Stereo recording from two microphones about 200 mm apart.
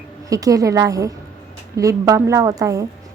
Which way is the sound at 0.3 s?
15° right (ahead or behind).